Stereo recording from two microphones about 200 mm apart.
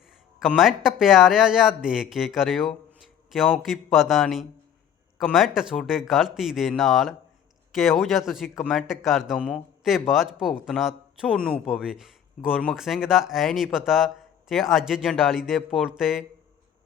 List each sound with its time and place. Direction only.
0.3 s speech: centre (ahead or behind)